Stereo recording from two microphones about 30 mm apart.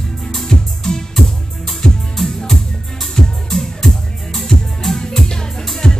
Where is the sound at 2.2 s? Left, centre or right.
Centre.